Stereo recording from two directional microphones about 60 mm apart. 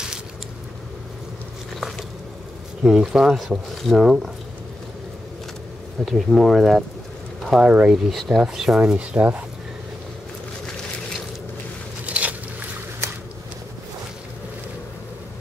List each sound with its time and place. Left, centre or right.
1.8 s a sound: centre
2.8 s speech: centre
6.0 s speech: centre
7.7 s speech: right
8.1 s speech: centre
8.8 s speech: right
12.1 s a sound: right